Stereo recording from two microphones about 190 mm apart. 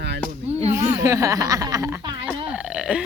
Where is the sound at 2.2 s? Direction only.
5° right (ahead or behind).